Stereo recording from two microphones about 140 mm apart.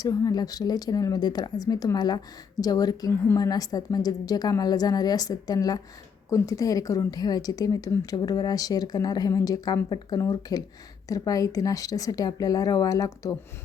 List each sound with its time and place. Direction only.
0.0 s a woman's voice: 25° left (ahead or behind)